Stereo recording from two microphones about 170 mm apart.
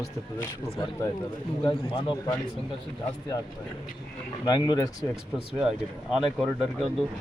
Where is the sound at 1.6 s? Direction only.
25° left (ahead or behind).